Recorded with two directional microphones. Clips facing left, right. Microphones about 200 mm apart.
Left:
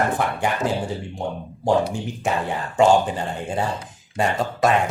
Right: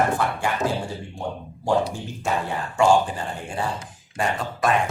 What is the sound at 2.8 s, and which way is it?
Speech, 20° left (ahead or behind).